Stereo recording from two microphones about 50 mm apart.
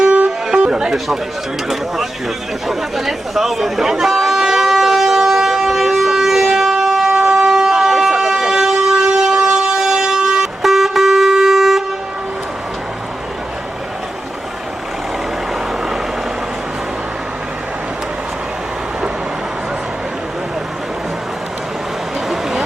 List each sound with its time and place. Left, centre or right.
0.0 s music: right
0.3 s music: centre
0.9 s speech: centre
2.6 s chatter: centre
22.3 s a sound: centre